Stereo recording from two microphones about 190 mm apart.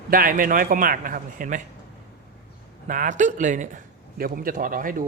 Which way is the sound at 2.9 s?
40° right (ahead or behind).